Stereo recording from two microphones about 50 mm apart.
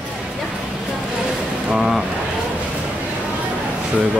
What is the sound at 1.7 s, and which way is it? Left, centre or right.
Speech, centre.